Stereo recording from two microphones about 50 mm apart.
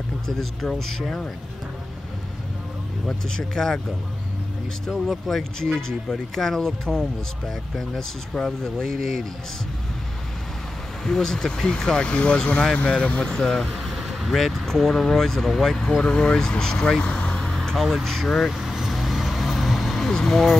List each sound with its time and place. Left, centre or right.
0.3 s speech: centre
3.1 s speech: centre
5.3 s speech: centre
11.1 s speech: centre
13.6 s speech: centre; by 17.4 s left
17.4 s speech: centre
18.5 s vehicle: centre